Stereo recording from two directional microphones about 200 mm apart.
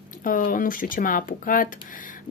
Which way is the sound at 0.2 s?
45° left (ahead or behind).